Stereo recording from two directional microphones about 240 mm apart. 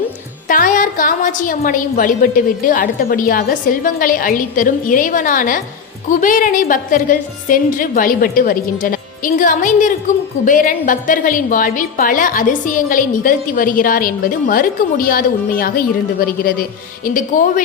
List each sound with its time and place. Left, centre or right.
0.4 s a woman's voice: left